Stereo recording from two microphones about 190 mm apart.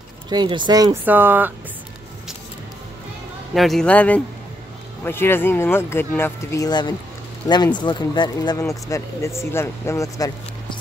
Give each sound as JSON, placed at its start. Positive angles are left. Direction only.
{"t": 0.3, "sound": "speech", "side_deg": -25}
{"t": 1.0, "sound": "speech", "side_deg": -10}
{"t": 3.5, "sound": "speech", "side_deg": 0}